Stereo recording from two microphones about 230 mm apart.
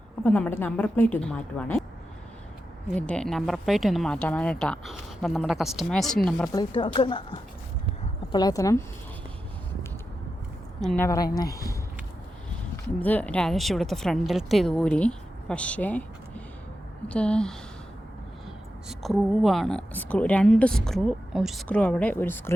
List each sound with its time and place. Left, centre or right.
0.3 s a woman's voice: centre
2.9 s a woman's voice: centre
6.5 s a woman's voice: centre
10.8 s a woman's voice: centre
18.9 s a woman's voice: centre